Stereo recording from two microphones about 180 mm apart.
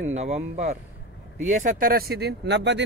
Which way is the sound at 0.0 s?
40° right (ahead or behind).